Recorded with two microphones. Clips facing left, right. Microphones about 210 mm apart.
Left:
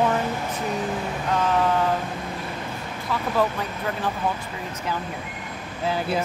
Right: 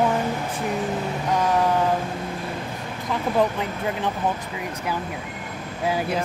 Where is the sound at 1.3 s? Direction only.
15° right (ahead or behind).